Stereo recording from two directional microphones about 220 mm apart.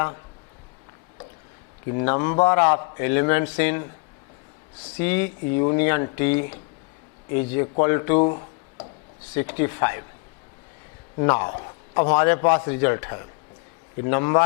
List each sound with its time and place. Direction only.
1.9 s a man's voice: 15° left (ahead or behind)
4.9 s a man's voice: 10° left (ahead or behind)
8.3 s a sound: 30° left (ahead or behind)
9.3 s a man's voice: 10° left (ahead or behind)
11.2 s a man's voice: 15° left (ahead or behind)